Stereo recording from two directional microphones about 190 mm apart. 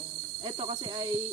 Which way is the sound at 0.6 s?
25° right (ahead or behind).